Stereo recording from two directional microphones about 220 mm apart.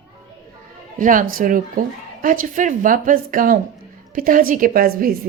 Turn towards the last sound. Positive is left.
turn(degrees=-40)  # may be behind; listen again after turning